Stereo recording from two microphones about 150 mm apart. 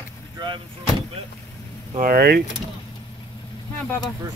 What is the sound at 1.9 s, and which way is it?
Speech, 80° right.